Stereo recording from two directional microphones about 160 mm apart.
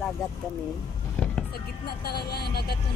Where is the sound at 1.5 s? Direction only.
80° left.